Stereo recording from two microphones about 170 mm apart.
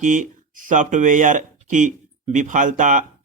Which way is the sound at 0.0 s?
50° right (ahead or behind).